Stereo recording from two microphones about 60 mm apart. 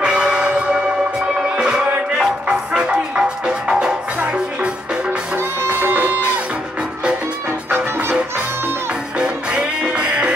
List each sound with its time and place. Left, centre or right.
0.0 s bell: centre
1.6 s music: centre
5.6 s music: right
7.7 s music: right
9.2 s music: centre